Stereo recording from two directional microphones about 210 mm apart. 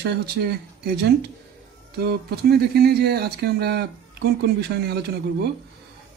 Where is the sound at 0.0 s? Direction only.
50° right (ahead or behind).